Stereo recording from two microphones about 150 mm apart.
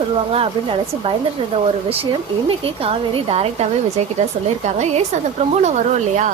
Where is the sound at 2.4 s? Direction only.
40° right (ahead or behind).